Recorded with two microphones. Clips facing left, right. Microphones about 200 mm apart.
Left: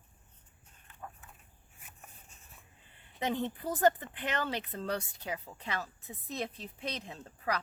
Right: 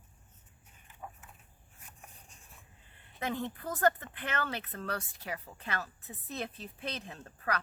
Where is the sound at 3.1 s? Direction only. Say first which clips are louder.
Left 2 dB; 20° left (ahead or behind).